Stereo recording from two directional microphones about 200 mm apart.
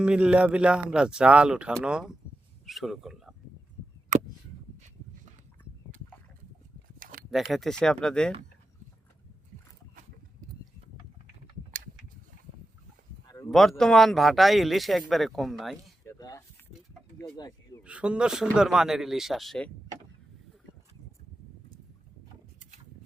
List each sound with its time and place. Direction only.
0.0 s speech: 5° right (ahead or behind)
7.0 s a sound: 45° right (ahead or behind)
7.3 s speech: centre (ahead or behind)
13.5 s speech: centre (ahead or behind)
16.0 s a sound: 15° left (ahead or behind)
17.2 s speech: 20° left (ahead or behind)
17.8 s speech: 5° right (ahead or behind)